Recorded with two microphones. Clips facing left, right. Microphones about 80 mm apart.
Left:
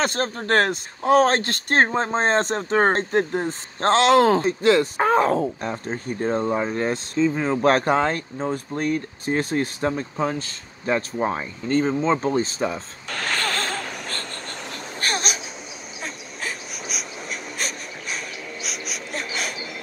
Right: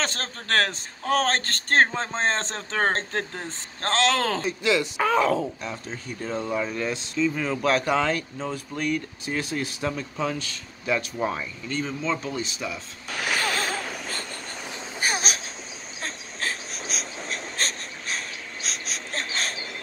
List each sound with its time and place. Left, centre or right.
0.0 s speech: centre
4.4 s speech: left
7.6 s speech: left
13.1 s vehicle: centre
15.0 s a sound: centre